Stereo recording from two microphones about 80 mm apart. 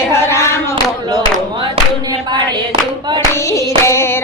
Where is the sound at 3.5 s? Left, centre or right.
Left.